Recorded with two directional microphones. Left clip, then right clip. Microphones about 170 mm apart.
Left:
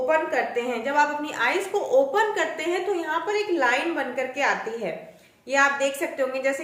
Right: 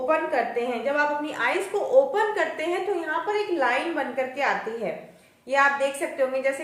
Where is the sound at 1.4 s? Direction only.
15° left (ahead or behind).